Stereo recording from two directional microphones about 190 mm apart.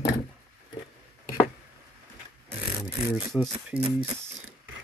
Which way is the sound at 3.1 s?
Centre (ahead or behind).